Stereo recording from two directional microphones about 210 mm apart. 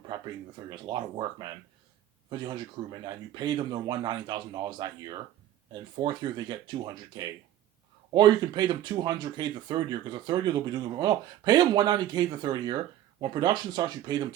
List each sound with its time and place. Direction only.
0.7 s speech: 20° right (ahead or behind)